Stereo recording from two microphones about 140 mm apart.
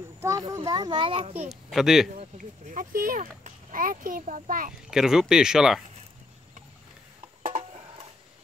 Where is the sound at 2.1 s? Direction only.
55° right (ahead or behind); by 4.7 s 70° right (ahead or behind).